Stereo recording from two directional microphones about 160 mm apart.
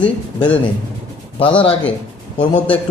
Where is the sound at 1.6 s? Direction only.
35° left (ahead or behind).